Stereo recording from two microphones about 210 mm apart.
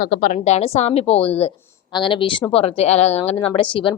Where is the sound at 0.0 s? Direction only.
45° left (ahead or behind).